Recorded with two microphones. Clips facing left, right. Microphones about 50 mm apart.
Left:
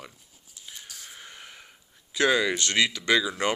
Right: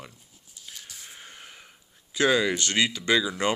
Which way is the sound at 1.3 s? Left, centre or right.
Left.